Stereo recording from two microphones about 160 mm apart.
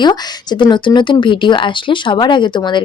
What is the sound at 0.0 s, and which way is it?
Speech, 25° left (ahead or behind).